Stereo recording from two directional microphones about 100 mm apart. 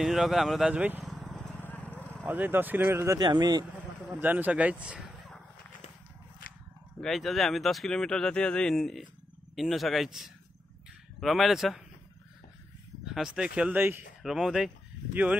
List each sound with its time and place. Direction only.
0.0 s speech: 5° right (ahead or behind)
0.7 s speech: 15° right (ahead or behind)
1.0 s vehicle: centre (ahead or behind)
1.5 s vehicle: 20° left (ahead or behind)
2.2 s speech: 20° right (ahead or behind)
3.2 s speech: 45° right (ahead or behind)
4.2 s speech: 15° right (ahead or behind)
7.0 s speech: 5° left (ahead or behind)
13.0 s speech: 5° right (ahead or behind)
13.7 s speech: 20° right (ahead or behind)
14.2 s speech: 5° right (ahead or behind)